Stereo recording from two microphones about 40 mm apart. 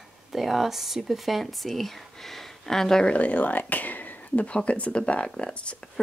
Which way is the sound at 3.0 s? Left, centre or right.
Left.